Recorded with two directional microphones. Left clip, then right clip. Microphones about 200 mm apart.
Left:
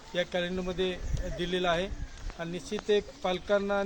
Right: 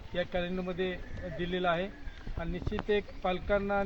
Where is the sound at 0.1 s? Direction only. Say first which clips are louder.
Left 3 dB; 15° left (ahead or behind).